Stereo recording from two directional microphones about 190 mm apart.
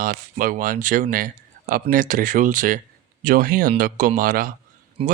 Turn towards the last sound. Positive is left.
turn(degrees=-30)  # may be behind; listen again after turning